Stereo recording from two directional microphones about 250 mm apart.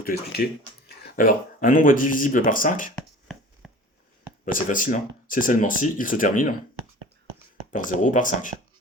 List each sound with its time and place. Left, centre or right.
0.4 s speech: left
3.6 s a sound: centre
4.5 s speech: left
7.7 s speech: left